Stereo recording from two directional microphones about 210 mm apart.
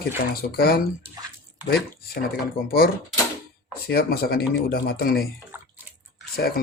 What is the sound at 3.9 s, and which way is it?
Speech, 45° left (ahead or behind).